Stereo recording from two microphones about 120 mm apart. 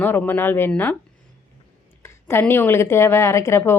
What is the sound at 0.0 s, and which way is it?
Speech, 15° left (ahead or behind).